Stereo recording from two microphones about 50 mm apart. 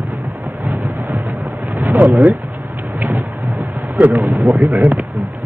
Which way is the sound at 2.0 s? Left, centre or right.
Right.